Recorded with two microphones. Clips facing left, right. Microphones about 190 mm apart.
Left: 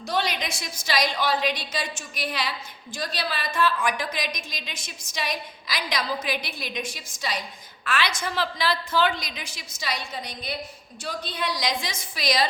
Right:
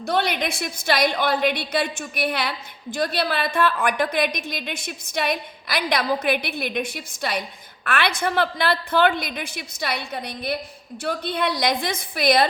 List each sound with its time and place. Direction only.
0.0 s a woman's voice: 55° right (ahead or behind)